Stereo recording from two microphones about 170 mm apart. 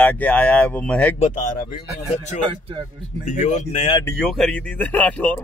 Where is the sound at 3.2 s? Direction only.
45° left (ahead or behind).